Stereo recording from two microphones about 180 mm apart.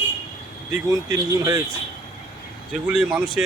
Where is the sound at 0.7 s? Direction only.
20° right (ahead or behind).